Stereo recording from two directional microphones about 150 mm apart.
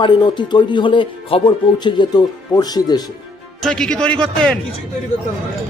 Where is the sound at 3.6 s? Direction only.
5° left (ahead or behind).